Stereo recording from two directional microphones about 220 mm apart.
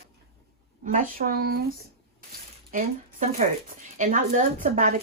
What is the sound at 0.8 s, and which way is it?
Speech, 35° right (ahead or behind).